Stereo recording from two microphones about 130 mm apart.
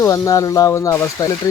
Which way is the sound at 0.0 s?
25° left (ahead or behind).